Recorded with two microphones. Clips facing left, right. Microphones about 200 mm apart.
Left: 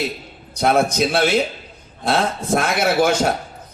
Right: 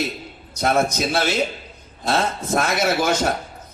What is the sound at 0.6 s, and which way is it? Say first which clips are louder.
A man's voice: left 3 dB; 55° left (ahead or behind).